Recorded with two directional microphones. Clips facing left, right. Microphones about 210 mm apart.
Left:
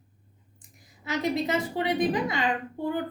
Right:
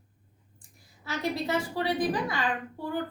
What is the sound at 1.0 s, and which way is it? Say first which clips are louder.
A woman's voice: left 3 dB; 20° left (ahead or behind).